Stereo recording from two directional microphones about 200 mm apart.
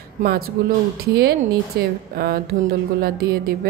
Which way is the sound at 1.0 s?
50° right (ahead or behind).